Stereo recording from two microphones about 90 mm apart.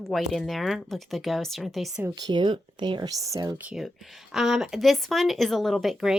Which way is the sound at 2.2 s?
60° right (ahead or behind).